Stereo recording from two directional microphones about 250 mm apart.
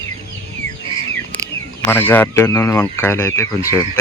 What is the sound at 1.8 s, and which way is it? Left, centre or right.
Speech, centre.